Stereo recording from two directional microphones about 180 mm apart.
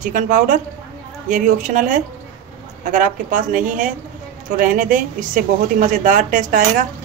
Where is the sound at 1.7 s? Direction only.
45° right (ahead or behind).